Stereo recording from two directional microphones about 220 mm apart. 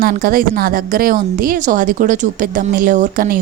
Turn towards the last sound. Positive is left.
turn(degrees=-40)  # may be behind; listen again after turning